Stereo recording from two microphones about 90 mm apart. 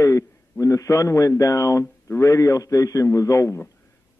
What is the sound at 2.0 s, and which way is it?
Speech, 35° left (ahead or behind).